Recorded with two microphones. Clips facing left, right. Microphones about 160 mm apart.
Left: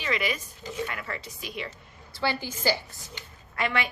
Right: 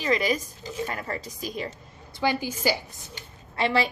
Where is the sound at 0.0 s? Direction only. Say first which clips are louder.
Right 5 dB; 40° right (ahead or behind).